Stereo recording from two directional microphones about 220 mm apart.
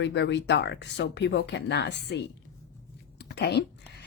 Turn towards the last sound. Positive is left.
turn(degrees=50)  # may be behind; listen again after turning